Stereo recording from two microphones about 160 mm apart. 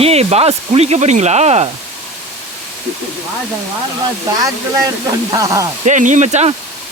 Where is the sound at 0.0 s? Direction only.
40° right (ahead or behind).